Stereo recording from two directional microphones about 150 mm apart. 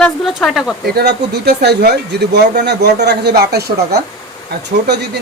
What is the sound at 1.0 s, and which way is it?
Speech, 90° right.